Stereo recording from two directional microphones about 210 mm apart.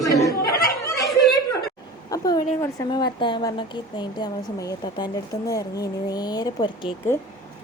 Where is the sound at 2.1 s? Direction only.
15° left (ahead or behind).